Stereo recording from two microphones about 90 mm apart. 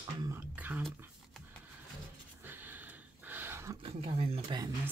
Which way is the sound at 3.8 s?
90° right.